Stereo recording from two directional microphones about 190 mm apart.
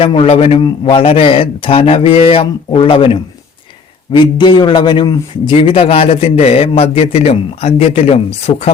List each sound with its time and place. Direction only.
0.0 s a man's voice: 30° left (ahead or behind)